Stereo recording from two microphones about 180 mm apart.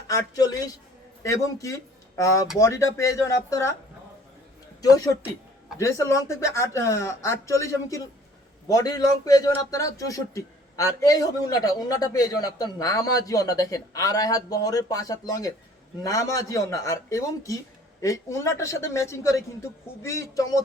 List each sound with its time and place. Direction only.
0.1 s a man's voice: 20° left (ahead or behind)
4.8 s a man's voice: 20° left (ahead or behind)